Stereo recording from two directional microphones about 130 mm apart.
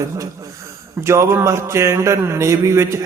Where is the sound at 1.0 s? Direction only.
20° right (ahead or behind).